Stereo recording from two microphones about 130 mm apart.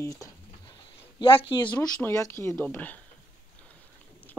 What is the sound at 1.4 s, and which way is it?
Speech, 35° left (ahead or behind).